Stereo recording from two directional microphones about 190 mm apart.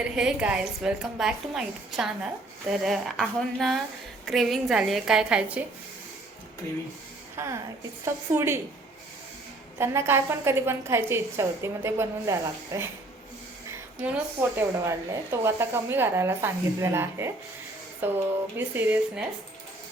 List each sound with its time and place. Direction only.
0.0 s a woman's voice: 5° right (ahead or behind)
7.3 s a woman's voice: 15° right (ahead or behind)
9.7 s a woman's voice: 15° right (ahead or behind)
14.5 s a woman's voice: 15° right (ahead or behind)